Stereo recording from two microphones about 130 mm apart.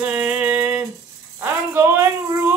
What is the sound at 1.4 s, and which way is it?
Speech, 20° right (ahead or behind).